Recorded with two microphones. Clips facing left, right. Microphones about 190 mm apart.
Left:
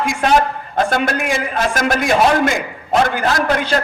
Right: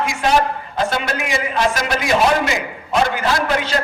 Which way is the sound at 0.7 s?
50° left (ahead or behind).